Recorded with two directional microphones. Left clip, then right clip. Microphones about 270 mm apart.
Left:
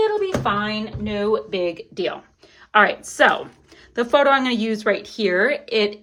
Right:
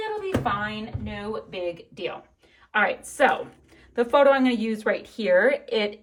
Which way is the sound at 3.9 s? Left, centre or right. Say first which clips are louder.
Left 2 dB; centre.